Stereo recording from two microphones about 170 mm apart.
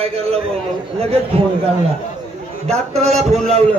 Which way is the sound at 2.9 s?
40° right (ahead or behind).